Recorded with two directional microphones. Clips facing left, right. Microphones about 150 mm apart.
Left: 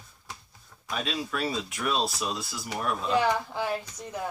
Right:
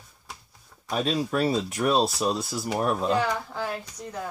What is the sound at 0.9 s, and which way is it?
Speech, 40° right (ahead or behind).